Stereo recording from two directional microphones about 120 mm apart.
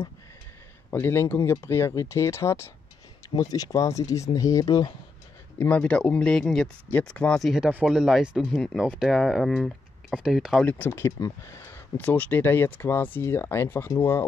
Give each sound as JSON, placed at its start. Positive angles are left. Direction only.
{"t": 0.8, "sound": "speech", "side_deg": 20}
{"t": 5.6, "sound": "speech", "side_deg": 10}
{"t": 10.6, "sound": "speech", "side_deg": 15}